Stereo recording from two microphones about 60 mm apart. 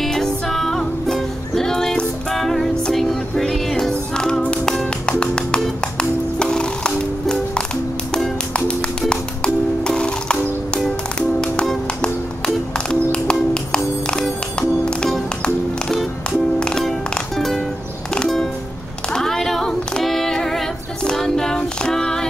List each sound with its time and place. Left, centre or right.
0.0 s music: centre
16.3 s music: centre
17.1 s music: centre
19.1 s female singing: centre